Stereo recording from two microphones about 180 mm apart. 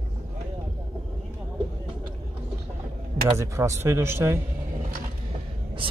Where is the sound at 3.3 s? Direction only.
15° right (ahead or behind).